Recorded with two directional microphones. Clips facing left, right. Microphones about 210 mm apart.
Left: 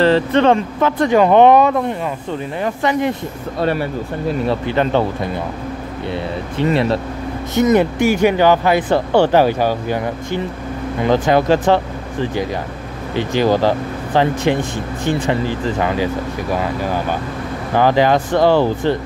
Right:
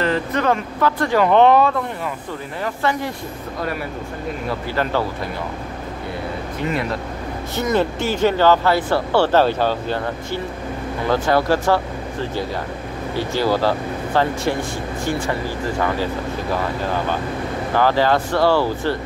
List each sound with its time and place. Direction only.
0.0 s speech: 30° left (ahead or behind)
4.5 s speech: 20° left (ahead or behind)
6.6 s speech: 30° left (ahead or behind)
7.5 s speech: 15° left (ahead or behind)
17.7 s speech: 15° left (ahead or behind)